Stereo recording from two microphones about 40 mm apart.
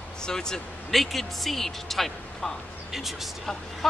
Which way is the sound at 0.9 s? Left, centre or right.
Centre.